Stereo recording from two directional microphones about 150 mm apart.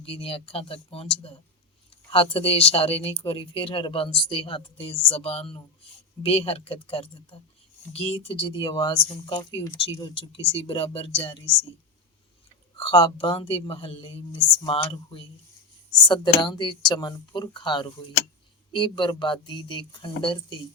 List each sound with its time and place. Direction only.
0.0 s speech: 40° left (ahead or behind)
12.8 s speech: 35° left (ahead or behind)